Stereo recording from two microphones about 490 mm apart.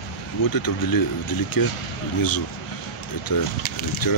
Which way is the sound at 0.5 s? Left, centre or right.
Left.